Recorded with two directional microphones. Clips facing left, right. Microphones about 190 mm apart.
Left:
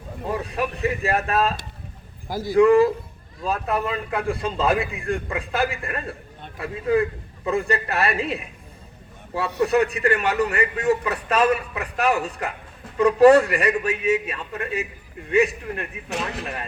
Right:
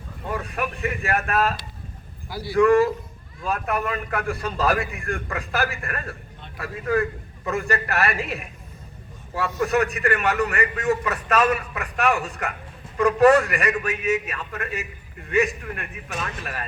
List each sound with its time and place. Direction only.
0.5 s a man's voice: 35° left (ahead or behind)
2.2 s a man's voice: 45° left (ahead or behind)
9.6 s a man's voice: 30° left (ahead or behind)
16.0 s speech: 70° left (ahead or behind)